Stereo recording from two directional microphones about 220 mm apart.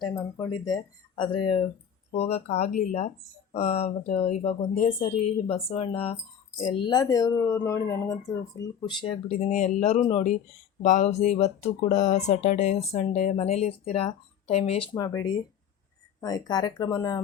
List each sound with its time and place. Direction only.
0.0 s speech: 15° left (ahead or behind)